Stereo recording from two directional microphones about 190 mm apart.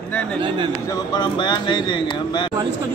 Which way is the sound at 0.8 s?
20° left (ahead or behind).